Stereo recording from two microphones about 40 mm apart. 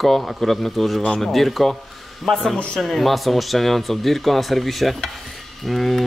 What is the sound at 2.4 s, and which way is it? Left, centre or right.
Speech, left.